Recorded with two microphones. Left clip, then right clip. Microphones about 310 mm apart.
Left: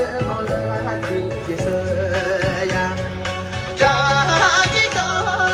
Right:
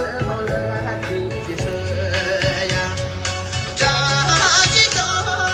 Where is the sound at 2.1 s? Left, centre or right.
Centre.